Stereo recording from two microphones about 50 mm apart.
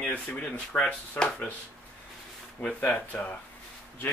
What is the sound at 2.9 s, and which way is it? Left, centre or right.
Speech, left.